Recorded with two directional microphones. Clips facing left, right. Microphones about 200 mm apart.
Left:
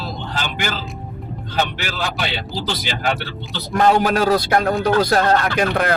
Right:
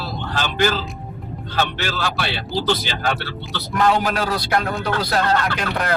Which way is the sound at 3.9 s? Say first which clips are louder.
Left 5 dB; 50° left (ahead or behind).